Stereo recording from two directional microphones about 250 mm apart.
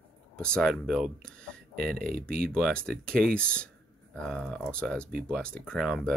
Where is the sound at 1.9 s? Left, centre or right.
Right.